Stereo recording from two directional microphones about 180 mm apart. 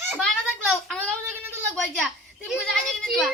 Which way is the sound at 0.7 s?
5° left (ahead or behind).